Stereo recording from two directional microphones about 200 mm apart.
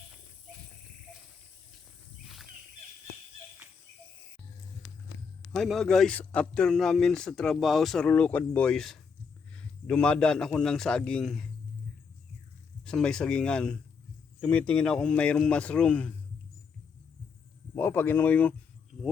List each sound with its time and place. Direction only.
2.2 s a sound: centre (ahead or behind)
4.8 s vehicle: 20° left (ahead or behind)
5.5 s a man's voice: centre (ahead or behind)
12.8 s a man's voice: 5° left (ahead or behind)
17.7 s speech: 10° left (ahead or behind)